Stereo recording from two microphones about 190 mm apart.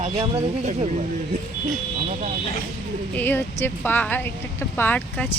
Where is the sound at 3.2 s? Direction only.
10° left (ahead or behind).